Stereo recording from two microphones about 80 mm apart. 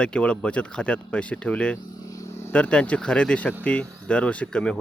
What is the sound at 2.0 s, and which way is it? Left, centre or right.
Vehicle, left.